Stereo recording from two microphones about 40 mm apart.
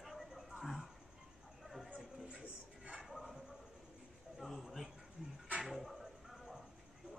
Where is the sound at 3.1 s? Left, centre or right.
Centre.